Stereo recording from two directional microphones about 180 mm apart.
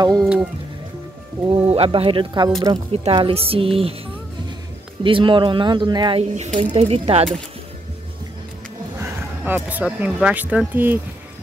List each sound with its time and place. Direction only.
0.2 s speech: centre (ahead or behind)
1.7 s speech: 30° right (ahead or behind)
5.0 s speech: 30° right (ahead or behind)
9.0 s speech: 10° right (ahead or behind)